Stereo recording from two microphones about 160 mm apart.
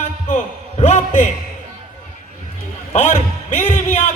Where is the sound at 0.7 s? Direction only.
45° left (ahead or behind).